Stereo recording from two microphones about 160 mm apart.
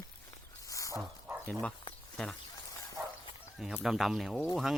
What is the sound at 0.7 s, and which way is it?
Dog, 20° left (ahead or behind).